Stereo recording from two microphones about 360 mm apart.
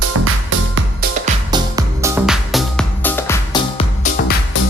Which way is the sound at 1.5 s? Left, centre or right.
Centre.